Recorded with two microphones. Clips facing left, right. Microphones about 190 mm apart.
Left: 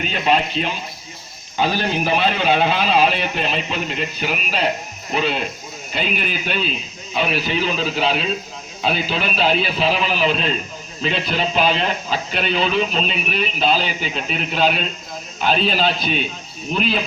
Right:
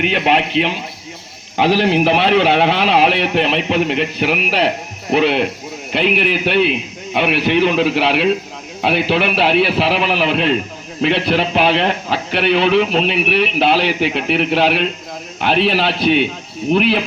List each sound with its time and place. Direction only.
0.0 s speech: 70° right (ahead or behind)